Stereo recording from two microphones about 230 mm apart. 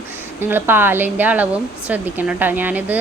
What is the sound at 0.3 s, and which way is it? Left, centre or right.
A woman's voice, centre.